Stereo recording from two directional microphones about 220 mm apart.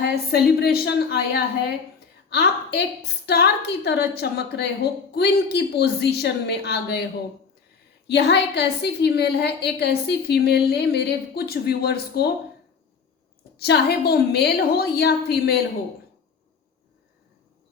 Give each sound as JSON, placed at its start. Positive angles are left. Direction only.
{"t": 0.3, "sound": "a woman's voice", "side_deg": 45}
{"t": 8.0, "sound": "a woman's voice", "side_deg": 50}
{"t": 13.6, "sound": "a woman's voice", "side_deg": 45}